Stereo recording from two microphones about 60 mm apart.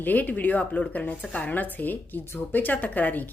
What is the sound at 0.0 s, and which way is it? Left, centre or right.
A woman's voice, left.